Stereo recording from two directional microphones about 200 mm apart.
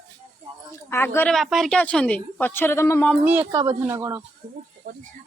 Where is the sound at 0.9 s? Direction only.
10° left (ahead or behind).